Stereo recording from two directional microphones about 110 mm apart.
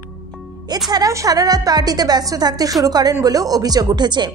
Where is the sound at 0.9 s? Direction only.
30° right (ahead or behind).